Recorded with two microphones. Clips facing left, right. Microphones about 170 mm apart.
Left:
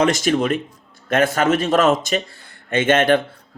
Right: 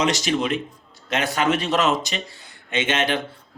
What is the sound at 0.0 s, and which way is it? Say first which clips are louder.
Speech: left 4 dB; 50° left (ahead or behind).